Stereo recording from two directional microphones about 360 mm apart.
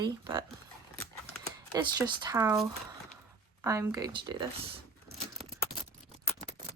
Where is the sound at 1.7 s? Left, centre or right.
Centre.